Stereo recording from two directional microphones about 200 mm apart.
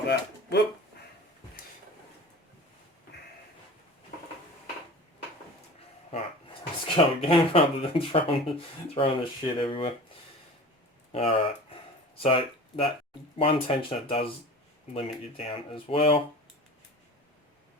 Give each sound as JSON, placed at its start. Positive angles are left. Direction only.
{"t": 6.1, "sound": "speech", "side_deg": 25}
{"t": 11.1, "sound": "a sound", "side_deg": 30}
{"t": 13.4, "sound": "speech", "side_deg": 30}